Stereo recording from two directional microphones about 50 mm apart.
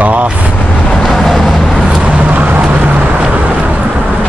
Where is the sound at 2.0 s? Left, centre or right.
Right.